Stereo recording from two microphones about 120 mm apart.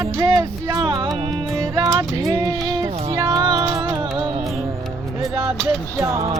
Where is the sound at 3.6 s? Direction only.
45° right (ahead or behind).